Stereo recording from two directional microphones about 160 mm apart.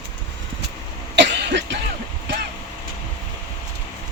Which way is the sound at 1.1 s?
90° right.